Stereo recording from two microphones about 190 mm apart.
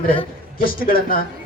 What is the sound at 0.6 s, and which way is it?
Speech, 50° left (ahead or behind).